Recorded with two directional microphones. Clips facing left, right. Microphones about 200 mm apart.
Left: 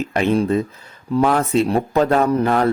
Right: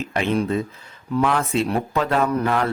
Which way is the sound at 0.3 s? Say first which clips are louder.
Left 4 dB; 40° left (ahead or behind).